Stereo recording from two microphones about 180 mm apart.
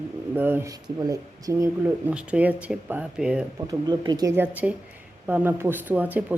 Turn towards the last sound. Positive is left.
turn(degrees=-10)  # may be behind; listen again after turning